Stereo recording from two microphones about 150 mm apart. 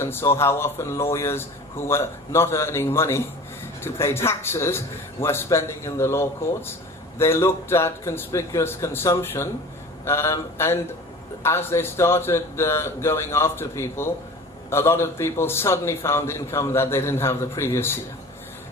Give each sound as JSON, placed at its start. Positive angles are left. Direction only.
{"t": 0.0, "sound": "speech", "side_deg": 15}